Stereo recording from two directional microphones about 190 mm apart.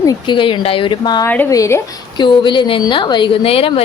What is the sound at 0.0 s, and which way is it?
A woman's voice, 20° left (ahead or behind).